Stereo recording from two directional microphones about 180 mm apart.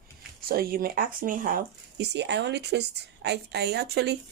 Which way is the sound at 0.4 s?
55° right (ahead or behind).